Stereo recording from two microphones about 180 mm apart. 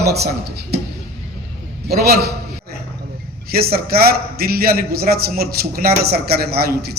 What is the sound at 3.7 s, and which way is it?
A man's voice, 55° right (ahead or behind).